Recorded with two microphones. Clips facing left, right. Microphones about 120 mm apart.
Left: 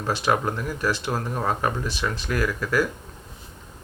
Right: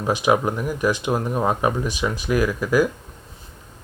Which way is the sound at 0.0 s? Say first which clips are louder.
Right 4 dB; 15° right (ahead or behind).